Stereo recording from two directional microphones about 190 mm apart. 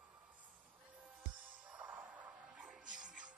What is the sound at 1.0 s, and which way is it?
Music, 5° right (ahead or behind).